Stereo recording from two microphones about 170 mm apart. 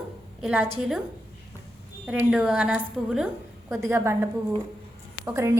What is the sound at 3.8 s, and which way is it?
A woman's voice, 15° right (ahead or behind).